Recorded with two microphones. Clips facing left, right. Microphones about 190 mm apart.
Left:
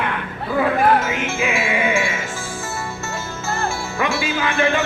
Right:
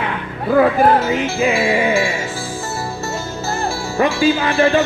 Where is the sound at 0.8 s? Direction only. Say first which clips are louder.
Right 3 dB; 35° right (ahead or behind).